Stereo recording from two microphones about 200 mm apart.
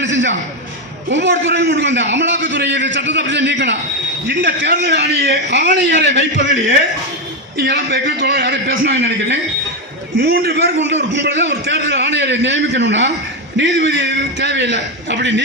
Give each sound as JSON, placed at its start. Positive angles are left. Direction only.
{"t": 0.0, "sound": "a man's voice", "side_deg": -65}
{"t": 7.6, "sound": "a man's voice", "side_deg": -60}
{"t": 10.2, "sound": "a man's voice", "side_deg": -50}